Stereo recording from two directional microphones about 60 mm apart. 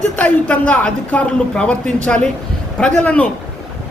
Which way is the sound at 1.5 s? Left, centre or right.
Centre.